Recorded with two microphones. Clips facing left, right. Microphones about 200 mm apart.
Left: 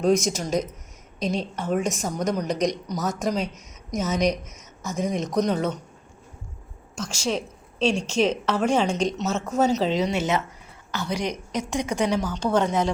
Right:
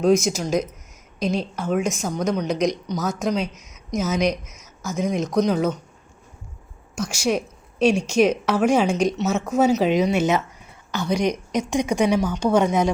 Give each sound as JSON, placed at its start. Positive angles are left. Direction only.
{"t": 0.0, "sound": "a woman's voice", "side_deg": 0}
{"t": 6.9, "sound": "a woman's voice", "side_deg": -10}